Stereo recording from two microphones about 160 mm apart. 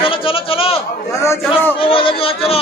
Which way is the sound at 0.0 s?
35° left (ahead or behind).